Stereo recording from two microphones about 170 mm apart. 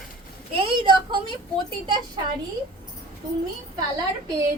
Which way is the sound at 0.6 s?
30° right (ahead or behind).